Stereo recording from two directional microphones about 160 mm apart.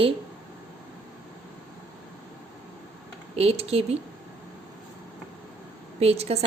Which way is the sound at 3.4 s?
40° right (ahead or behind).